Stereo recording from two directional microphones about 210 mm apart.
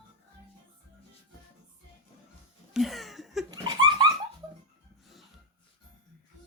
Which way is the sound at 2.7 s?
Centre (ahead or behind).